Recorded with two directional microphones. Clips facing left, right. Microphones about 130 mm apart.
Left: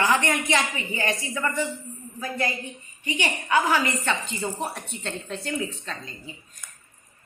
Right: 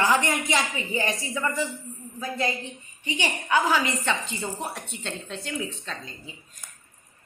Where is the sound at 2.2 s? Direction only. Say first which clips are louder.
Even; 25° right (ahead or behind).